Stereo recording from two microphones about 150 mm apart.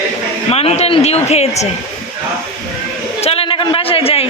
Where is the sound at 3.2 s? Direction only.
40° left (ahead or behind).